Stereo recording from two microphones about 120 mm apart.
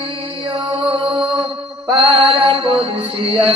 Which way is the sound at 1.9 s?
50° right (ahead or behind).